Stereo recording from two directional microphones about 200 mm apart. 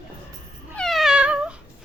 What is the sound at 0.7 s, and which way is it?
Cat, centre (ahead or behind).